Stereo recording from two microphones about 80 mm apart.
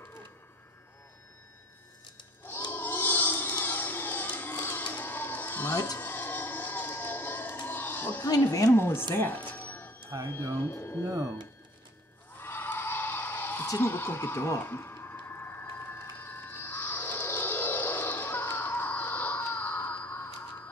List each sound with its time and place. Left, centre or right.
2.7 s crowd: left
5.9 s a sound: left
8.7 s speech: left
9.1 s music: left
10.6 s speech: left
12.4 s a sound: left
13.7 s neigh: left